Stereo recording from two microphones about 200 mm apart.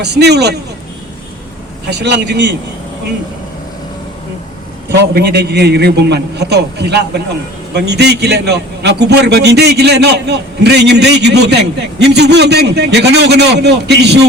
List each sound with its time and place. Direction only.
0.0 s a man's voice: 55° right (ahead or behind)
1.9 s a man's voice: 55° right (ahead or behind)
4.9 s a man's voice: 55° right (ahead or behind)